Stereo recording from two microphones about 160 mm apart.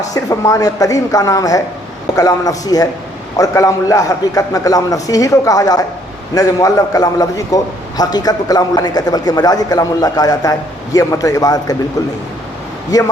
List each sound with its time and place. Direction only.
0.1 s a man's voice: 20° left (ahead or behind)
12.9 s a man's voice: 25° left (ahead or behind)